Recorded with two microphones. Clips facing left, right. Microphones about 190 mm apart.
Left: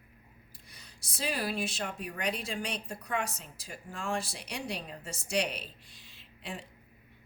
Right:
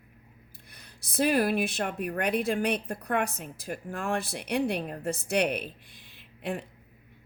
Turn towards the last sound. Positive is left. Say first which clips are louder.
# right 9 dB
turn(degrees=-60)  # may be behind; listen again after turning